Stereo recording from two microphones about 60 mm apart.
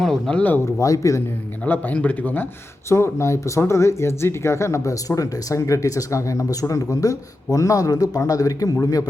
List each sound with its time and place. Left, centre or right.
0.0 s a sound: centre
0.3 s speech: left
0.8 s a man's voice: left
1.6 s speech: left
2.9 s speech: left